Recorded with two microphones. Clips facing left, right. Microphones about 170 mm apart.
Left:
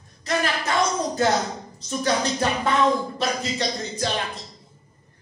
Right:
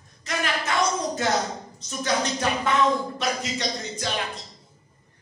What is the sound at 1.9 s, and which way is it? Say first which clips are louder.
Speech: left 3 dB; 35° left (ahead or behind).